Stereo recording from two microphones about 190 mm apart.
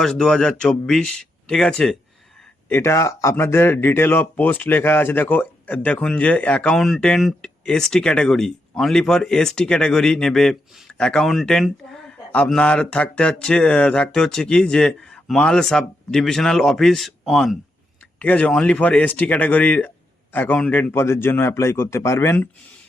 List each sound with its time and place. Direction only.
0.0 s a man's voice: 5° left (ahead or behind)